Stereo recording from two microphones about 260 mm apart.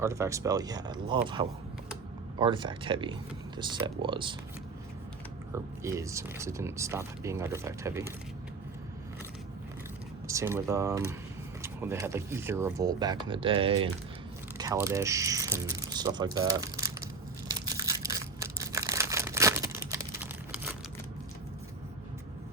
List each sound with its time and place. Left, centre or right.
0.0 s speech: centre
5.5 s speech: centre
10.2 s speech: centre
17.5 s crumpling: centre